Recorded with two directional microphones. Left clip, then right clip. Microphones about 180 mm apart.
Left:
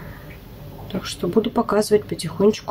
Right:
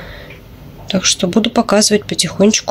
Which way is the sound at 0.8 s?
20° right (ahead or behind).